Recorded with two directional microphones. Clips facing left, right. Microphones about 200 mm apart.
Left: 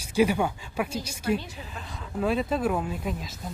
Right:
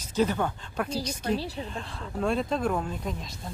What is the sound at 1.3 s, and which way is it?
Speech, 35° right (ahead or behind).